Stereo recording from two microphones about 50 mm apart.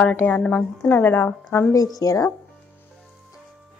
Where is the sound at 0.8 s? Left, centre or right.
Left.